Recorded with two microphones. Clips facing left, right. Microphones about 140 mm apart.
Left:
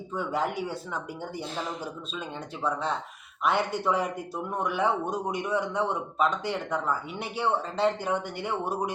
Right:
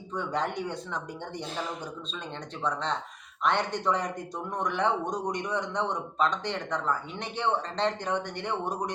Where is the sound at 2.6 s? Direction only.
5° left (ahead or behind).